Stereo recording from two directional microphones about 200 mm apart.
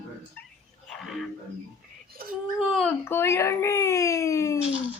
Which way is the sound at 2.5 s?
Centre (ahead or behind).